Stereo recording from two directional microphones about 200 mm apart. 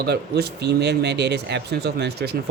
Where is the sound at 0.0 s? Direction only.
55° right (ahead or behind).